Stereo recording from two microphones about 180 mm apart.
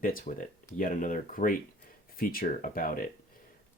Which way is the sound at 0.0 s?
50° left (ahead or behind).